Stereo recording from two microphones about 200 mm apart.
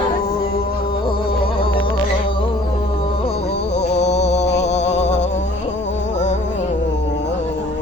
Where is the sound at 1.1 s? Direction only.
25° left (ahead or behind).